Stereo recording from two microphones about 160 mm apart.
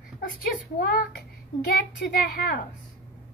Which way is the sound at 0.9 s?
75° left (ahead or behind).